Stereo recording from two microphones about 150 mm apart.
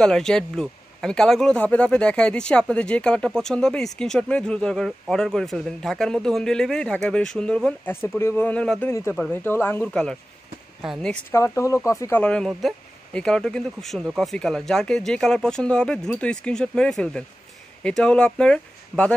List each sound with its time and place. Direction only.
0.0 s speech: 5° left (ahead or behind)
11.3 s speech: 20° left (ahead or behind)
12.2 s speech: 5° left (ahead or behind)